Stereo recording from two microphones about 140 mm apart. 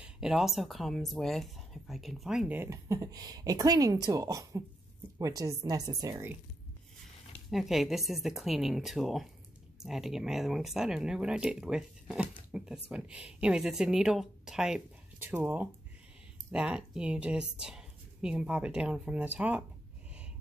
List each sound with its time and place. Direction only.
0.0 s speech: 5° right (ahead or behind); by 6.3 s 20° right (ahead or behind)
7.4 s speech: centre (ahead or behind)
15.1 s speech: 15° right (ahead or behind)